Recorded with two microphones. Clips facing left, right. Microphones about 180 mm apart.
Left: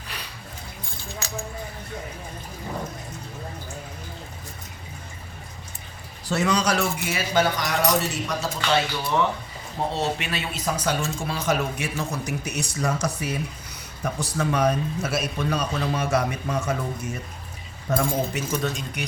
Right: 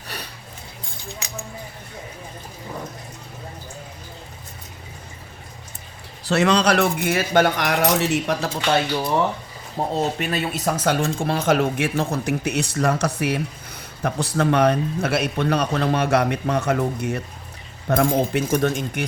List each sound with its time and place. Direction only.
1.2 s keys jangling: 15° right (ahead or behind)
6.2 s speech: 70° right (ahead or behind)
9.9 s speech: 45° right (ahead or behind)
10.8 s speech: 55° right (ahead or behind)